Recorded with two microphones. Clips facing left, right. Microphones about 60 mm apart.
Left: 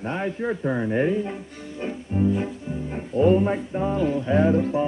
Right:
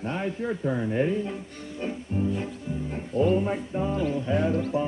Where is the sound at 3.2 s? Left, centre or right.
Left.